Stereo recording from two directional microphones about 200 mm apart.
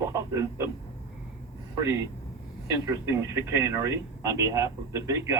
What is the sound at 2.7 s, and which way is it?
Speech, 15° right (ahead or behind).